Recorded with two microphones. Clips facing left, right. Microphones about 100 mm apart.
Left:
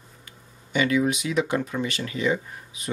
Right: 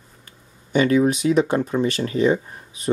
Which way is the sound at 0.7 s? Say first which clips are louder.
Right 5 dB; 40° right (ahead or behind).